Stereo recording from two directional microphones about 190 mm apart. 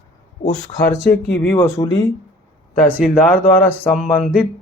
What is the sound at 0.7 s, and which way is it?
Speech, 15° left (ahead or behind).